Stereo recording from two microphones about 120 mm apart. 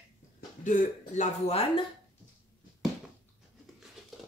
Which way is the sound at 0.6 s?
90° left.